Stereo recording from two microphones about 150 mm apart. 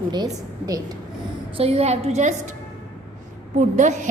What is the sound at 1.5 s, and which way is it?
A woman's voice, 40° right (ahead or behind).